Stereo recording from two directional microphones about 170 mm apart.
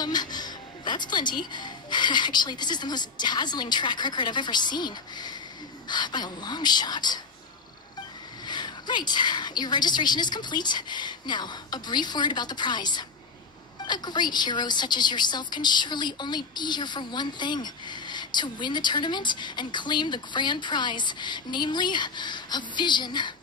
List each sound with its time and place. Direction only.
0.0 s music: 25° left (ahead or behind)
1.5 s a woman's voice: 25° left (ahead or behind)
8.5 s a woman's voice: 25° left (ahead or behind)